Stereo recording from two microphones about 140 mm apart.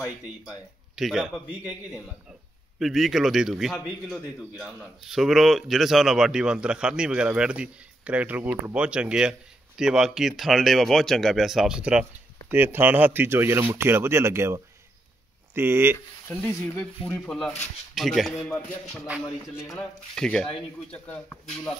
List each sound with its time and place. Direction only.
0.9 s speech: 5° right (ahead or behind)
2.8 s speech: centre (ahead or behind); by 16.0 s 15° right (ahead or behind)
16.3 s speech: 10° left (ahead or behind)
19.2 s a sound: 20° left (ahead or behind)
20.2 s speech: 5° left (ahead or behind)